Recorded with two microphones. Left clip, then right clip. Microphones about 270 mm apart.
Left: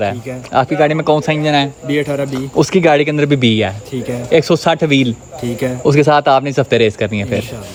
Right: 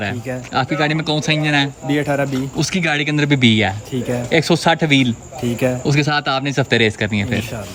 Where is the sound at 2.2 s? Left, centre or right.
Centre.